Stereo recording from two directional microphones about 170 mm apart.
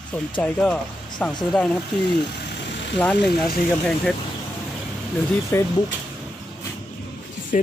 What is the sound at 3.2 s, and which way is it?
Speech, 70° left (ahead or behind).